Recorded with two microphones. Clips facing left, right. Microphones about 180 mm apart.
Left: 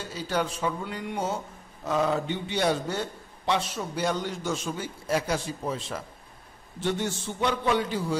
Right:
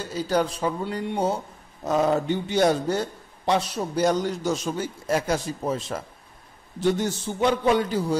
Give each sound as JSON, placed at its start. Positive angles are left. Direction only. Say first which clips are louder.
{"t": 0.0, "sound": "a man's voice", "louder": "right 5 dB", "side_deg": -40}